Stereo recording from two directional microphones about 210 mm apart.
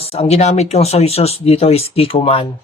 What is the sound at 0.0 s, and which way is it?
Speech, 30° left (ahead or behind).